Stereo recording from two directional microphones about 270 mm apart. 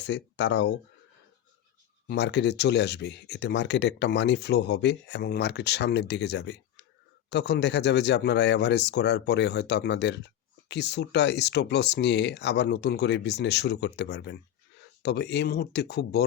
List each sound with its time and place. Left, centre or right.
0.0 s speech: left
2.0 s speech: left